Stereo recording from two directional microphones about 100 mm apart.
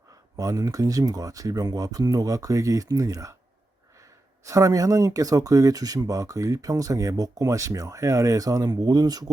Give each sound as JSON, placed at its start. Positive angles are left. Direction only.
{"t": 0.3, "sound": "speech", "side_deg": -35}
{"t": 4.4, "sound": "speech", "side_deg": -35}